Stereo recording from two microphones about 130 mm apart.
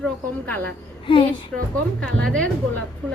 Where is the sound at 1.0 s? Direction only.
40° left (ahead or behind).